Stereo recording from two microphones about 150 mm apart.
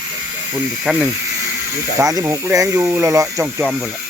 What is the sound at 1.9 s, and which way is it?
Speech, 20° right (ahead or behind).